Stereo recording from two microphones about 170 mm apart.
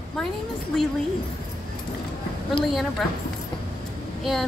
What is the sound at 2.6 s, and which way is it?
Speech, centre (ahead or behind).